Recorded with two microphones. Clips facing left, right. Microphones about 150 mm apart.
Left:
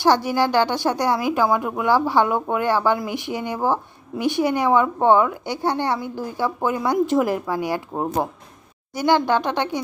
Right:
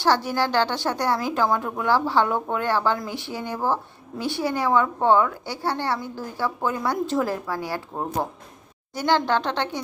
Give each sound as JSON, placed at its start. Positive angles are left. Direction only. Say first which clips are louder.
{"t": 0.0, "sound": "a woman's voice", "louder": "left 4 dB", "side_deg": 15}